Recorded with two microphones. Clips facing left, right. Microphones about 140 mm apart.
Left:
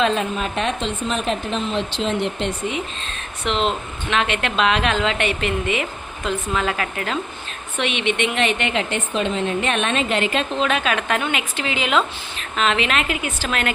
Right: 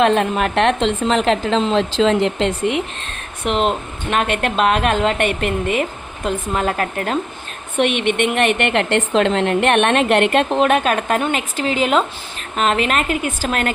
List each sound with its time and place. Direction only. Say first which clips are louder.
0.0 s a woman's voice: right 5 dB; 65° right (ahead or behind); by 2.8 s 85° right
3.4 s a woman's voice: right 3 dB; 50° right (ahead or behind)